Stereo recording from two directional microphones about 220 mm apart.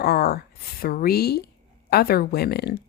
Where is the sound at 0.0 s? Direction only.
45° left (ahead or behind).